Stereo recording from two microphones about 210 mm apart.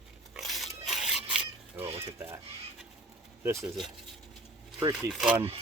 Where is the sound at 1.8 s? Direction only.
25° right (ahead or behind).